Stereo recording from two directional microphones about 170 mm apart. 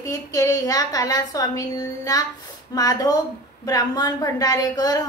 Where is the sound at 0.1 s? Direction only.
20° left (ahead or behind).